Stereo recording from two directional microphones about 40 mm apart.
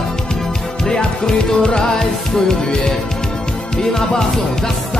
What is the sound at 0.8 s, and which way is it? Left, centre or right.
Music, centre.